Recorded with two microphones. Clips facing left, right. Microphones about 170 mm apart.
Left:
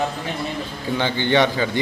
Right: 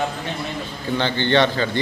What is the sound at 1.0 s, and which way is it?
Speech, 10° left (ahead or behind).